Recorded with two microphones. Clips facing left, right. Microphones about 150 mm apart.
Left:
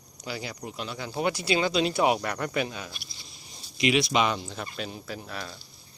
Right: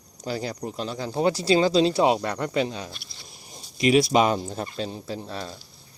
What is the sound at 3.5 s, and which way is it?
Speech, 45° right (ahead or behind).